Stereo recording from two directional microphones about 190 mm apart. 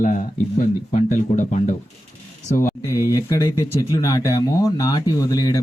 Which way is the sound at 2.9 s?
15° right (ahead or behind).